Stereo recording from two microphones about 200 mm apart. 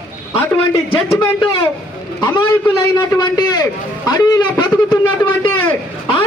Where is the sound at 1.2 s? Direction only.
20° left (ahead or behind).